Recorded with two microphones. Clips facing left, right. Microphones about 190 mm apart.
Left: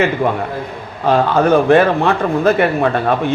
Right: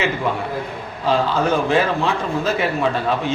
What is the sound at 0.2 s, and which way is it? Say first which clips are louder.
A man's voice: left 5 dB; 60° left (ahead or behind).